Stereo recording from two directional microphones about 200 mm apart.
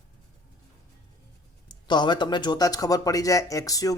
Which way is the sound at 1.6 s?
20° left (ahead or behind).